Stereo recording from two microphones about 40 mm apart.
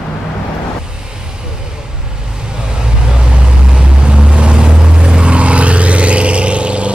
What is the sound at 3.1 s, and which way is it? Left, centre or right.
Vehicle, right.